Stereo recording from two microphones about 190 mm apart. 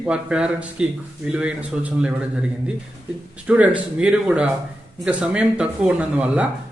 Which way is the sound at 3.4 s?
5° right (ahead or behind).